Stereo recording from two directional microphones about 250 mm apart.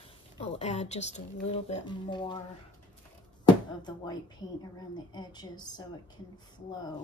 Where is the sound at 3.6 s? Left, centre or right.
Centre.